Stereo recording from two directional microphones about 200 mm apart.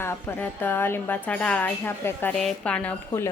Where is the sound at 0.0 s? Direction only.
10° left (ahead or behind).